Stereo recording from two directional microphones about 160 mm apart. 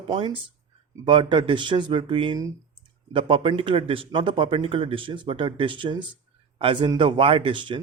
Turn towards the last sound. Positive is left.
turn(degrees=-30)  # may be behind; listen again after turning